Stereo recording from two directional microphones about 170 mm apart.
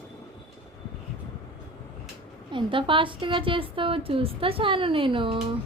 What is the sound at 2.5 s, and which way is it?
A woman's voice, 30° right (ahead or behind).